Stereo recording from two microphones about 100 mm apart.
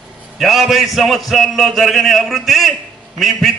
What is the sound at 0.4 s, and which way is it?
A man's voice, centre (ahead or behind).